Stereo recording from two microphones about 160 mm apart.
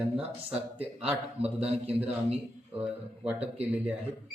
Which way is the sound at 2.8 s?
10° right (ahead or behind).